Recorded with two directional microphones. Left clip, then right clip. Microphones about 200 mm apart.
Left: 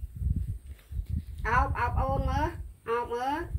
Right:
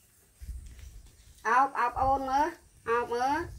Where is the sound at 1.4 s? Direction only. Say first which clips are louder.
Right 2 dB; 20° right (ahead or behind).